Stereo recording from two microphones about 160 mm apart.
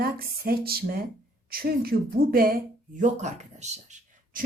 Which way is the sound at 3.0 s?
50° right (ahead or behind).